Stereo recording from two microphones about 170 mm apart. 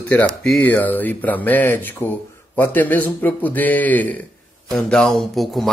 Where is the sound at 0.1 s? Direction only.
10° left (ahead or behind).